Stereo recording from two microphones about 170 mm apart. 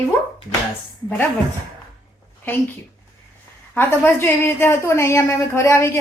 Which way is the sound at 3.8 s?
10° left (ahead or behind).